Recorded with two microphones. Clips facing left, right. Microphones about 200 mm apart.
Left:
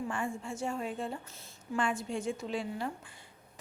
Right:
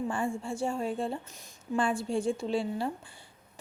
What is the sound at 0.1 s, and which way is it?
A woman's voice, 30° right (ahead or behind).